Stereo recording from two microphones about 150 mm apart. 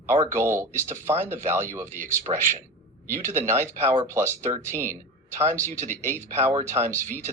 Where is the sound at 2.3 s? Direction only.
35° right (ahead or behind).